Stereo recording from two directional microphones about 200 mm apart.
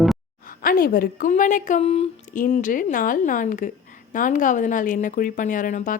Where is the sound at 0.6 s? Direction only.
45° left (ahead or behind).